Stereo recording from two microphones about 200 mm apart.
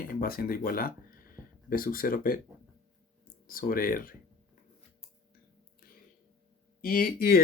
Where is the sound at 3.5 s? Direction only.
45° left (ahead or behind).